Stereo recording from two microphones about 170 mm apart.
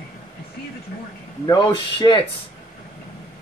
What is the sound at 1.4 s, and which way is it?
Speech, 25° left (ahead or behind).